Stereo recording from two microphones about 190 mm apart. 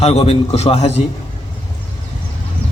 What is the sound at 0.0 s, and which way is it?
A man's voice, 35° left (ahead or behind).